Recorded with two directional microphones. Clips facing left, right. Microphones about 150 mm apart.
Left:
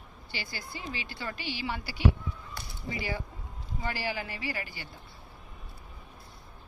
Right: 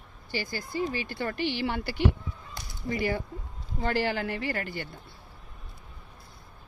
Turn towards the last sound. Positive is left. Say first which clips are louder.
# right 5 dB
turn(degrees=-55)  # may be behind; listen again after turning